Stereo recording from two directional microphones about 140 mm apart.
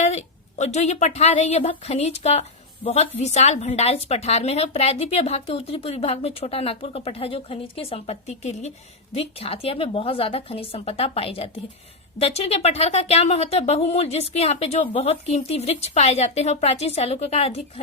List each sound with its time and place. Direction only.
0.0 s a woman's voice: 50° left (ahead or behind)